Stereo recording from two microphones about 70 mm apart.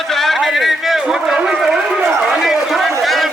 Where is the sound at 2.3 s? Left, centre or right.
Centre.